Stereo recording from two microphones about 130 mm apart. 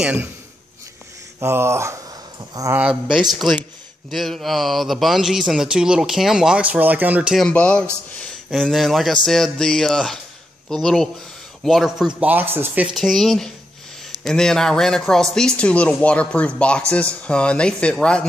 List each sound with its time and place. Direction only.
0.0 s speech: 10° right (ahead or behind)
1.4 s speech: 20° right (ahead or behind)
2.7 s a man's voice: 5° right (ahead or behind)
7.3 s a man's voice: 10° left (ahead or behind); by 12.9 s 15° right (ahead or behind)
12.9 s a man's voice: centre (ahead or behind)